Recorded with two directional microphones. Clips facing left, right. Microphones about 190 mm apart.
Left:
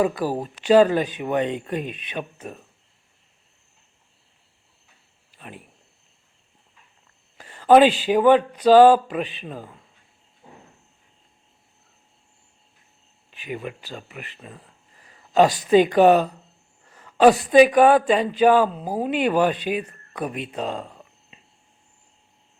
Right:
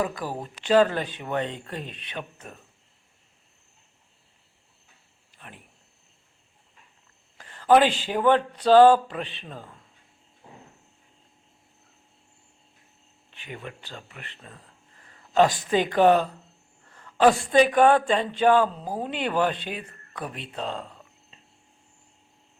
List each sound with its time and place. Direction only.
0.2 s speech: 35° left (ahead or behind)
0.6 s speech: 15° left (ahead or behind)
7.3 s a sound: 15° left (ahead or behind)
8.0 s speech: 15° left (ahead or behind)
13.4 s speech: 10° left (ahead or behind)
15.0 s a sound: 10° left (ahead or behind)
15.5 s speech: 15° left (ahead or behind)